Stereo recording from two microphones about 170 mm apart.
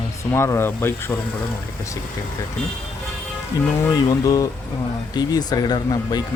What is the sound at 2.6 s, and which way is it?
Speech, 5° left (ahead or behind).